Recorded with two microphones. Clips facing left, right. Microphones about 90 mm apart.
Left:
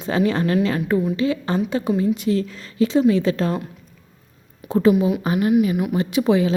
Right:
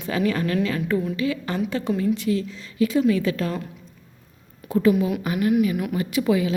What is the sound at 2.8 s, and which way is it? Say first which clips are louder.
Speech: left 3 dB; 30° left (ahead or behind).